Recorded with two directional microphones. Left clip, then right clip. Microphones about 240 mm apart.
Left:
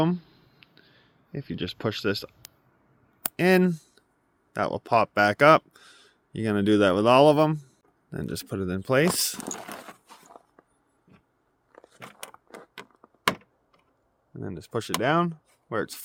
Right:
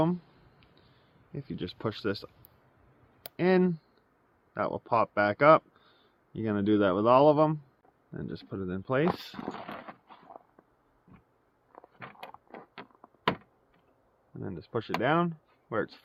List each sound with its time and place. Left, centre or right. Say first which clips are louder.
0.6 s a sound: left 7 dB; left
1.3 s speech: left 5 dB; left
3.3 s speech: left 4 dB; left
9.4 s dog: left 2 dB; left
9.7 s a sound: left 2 dB; left
14.3 s speech: left 3 dB; left